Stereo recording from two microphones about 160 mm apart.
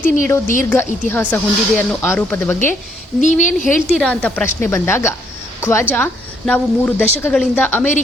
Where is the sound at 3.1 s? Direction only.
50° left (ahead or behind).